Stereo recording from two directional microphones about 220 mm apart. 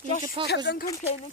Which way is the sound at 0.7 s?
55° left (ahead or behind).